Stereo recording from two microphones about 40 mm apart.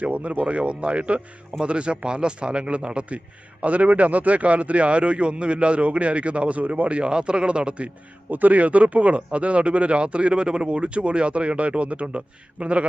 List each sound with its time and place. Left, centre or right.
0.0 s a man's voice: right
3.6 s speech: right
8.3 s speech: right